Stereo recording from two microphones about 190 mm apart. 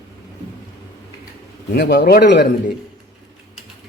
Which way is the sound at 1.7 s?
60° left (ahead or behind).